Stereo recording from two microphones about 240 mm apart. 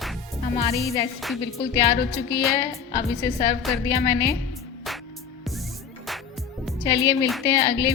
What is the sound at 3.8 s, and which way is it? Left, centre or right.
Speech, centre.